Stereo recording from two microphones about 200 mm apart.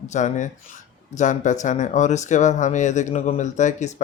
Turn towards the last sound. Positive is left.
turn(degrees=35)  # may be behind; listen again after turning